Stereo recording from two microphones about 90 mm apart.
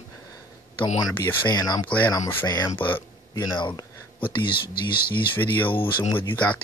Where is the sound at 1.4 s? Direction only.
50° left (ahead or behind).